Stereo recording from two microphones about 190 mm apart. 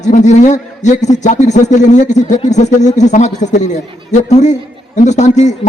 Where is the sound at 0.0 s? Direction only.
40° left (ahead or behind).